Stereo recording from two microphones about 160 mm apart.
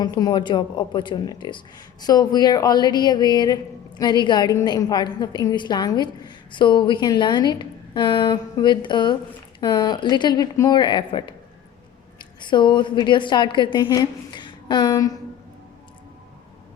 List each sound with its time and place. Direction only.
0.0 s a woman's voice: 25° left (ahead or behind)